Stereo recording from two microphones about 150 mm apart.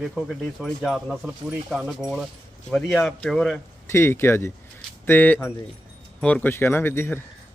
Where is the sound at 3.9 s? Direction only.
15° left (ahead or behind).